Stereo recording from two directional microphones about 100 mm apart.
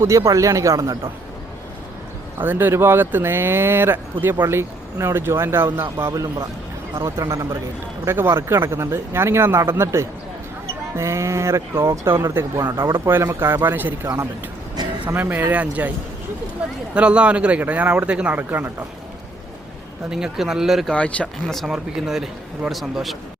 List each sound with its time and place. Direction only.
0.0 s speech: 30° right (ahead or behind)
2.4 s a man's voice: 20° right (ahead or behind)
16.9 s a man's voice: 10° right (ahead or behind)
20.1 s a man's voice: 5° right (ahead or behind)
20.9 s speech: 10° left (ahead or behind)
21.6 s a man's voice: 5° right (ahead or behind)